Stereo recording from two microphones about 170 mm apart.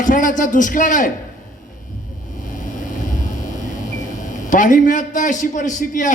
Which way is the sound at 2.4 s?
50° left (ahead or behind).